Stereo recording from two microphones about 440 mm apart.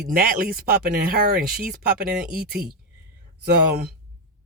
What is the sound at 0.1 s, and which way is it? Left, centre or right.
Speech, centre.